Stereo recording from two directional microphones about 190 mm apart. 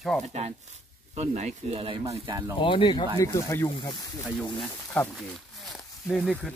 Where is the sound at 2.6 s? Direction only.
25° left (ahead or behind).